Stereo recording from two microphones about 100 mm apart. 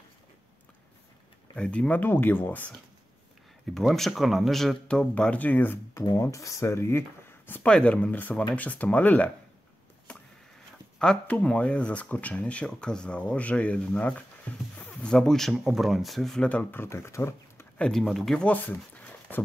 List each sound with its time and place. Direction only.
1.5 s speech: 10° left (ahead or behind)
3.7 s speech: 5° left (ahead or behind); by 6.0 s 20° left (ahead or behind)
6.0 s speech: 30° left (ahead or behind)
7.6 s speech: 10° left (ahead or behind)
10.1 s a sound: 10° left (ahead or behind)
11.0 s speech: 10° left (ahead or behind)
16.8 s speech: 25° left (ahead or behind)
17.7 s speech: 5° left (ahead or behind)
18.5 s speech: 15° left (ahead or behind)